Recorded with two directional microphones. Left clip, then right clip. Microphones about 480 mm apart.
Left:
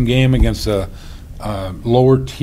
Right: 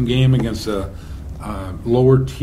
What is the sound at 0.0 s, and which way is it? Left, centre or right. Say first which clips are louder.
A man's voice: left 3 dB; left.